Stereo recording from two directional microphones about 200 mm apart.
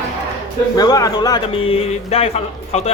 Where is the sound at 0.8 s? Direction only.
20° left (ahead or behind).